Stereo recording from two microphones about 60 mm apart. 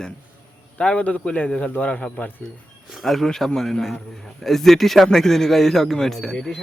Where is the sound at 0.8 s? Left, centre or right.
Centre.